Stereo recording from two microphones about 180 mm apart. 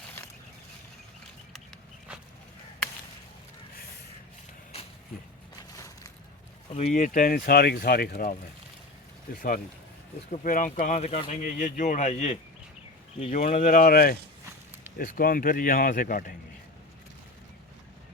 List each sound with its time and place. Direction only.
5.7 s a sound: 15° left (ahead or behind)
6.7 s speech: 45° left (ahead or behind)
10.4 s speech: 50° left (ahead or behind)